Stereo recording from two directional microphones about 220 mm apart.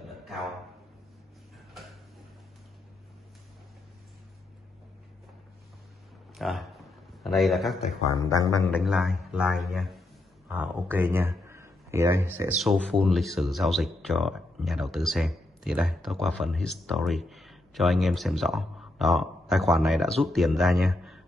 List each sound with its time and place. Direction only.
6.3 s speech: centre (ahead or behind)